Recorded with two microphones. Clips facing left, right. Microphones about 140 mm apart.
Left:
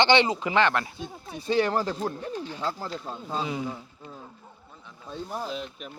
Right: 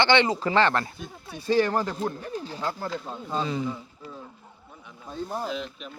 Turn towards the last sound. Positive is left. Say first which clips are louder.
# right 1 dB
turn(degrees=40)  # may be behind; listen again after turning